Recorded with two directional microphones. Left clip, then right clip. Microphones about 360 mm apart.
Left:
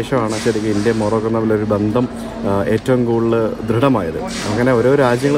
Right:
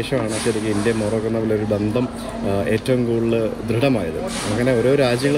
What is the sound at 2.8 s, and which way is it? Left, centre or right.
A man's voice, centre.